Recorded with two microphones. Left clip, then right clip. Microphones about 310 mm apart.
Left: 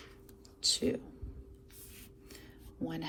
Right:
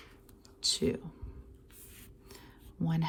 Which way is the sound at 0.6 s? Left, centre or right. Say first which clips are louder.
Even; centre.